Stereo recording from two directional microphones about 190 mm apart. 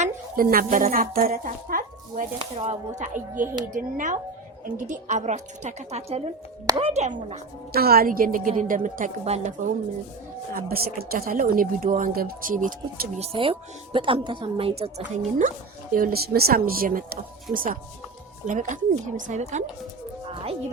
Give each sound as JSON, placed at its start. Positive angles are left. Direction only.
{"t": 0.0, "sound": "a woman's voice", "side_deg": -45}
{"t": 2.4, "sound": "a woman's voice", "side_deg": -30}
{"t": 7.7, "sound": "speech", "side_deg": -55}
{"t": 10.5, "sound": "speech", "side_deg": -50}
{"t": 16.0, "sound": "a woman's voice", "side_deg": -50}